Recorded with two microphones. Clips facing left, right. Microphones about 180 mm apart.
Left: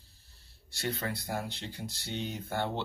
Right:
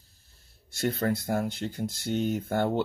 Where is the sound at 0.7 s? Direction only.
45° right (ahead or behind).